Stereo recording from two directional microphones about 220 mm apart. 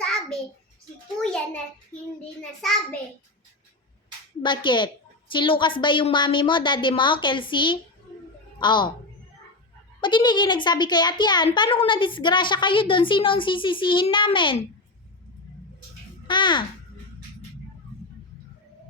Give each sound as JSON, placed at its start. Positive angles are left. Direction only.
{"t": 0.0, "sound": "a sound", "side_deg": 0}
{"t": 1.2, "sound": "a child's voice", "side_deg": 5}
{"t": 2.4, "sound": "a child's voice", "side_deg": 0}
{"t": 4.4, "sound": "a child's voice", "side_deg": 20}
{"t": 10.0, "sound": "a child's voice", "side_deg": 20}
{"t": 16.2, "sound": "a child's voice", "side_deg": 20}